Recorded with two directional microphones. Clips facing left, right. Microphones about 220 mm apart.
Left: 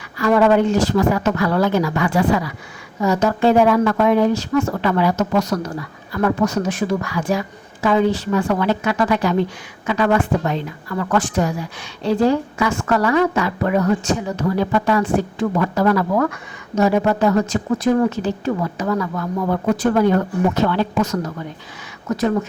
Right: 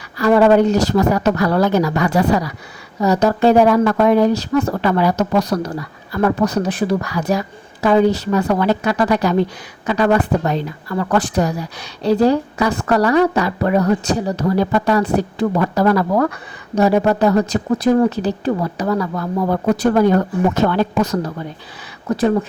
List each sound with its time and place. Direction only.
0.2 s a woman's voice: 35° right (ahead or behind)